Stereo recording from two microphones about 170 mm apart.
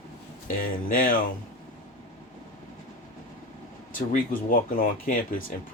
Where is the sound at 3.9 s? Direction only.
55° left (ahead or behind).